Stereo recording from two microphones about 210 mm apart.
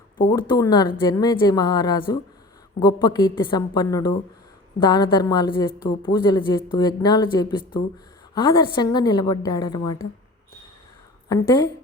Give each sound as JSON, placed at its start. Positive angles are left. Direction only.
{"t": 0.2, "sound": "a woman's voice", "side_deg": 20}
{"t": 11.3, "sound": "a woman's voice", "side_deg": 20}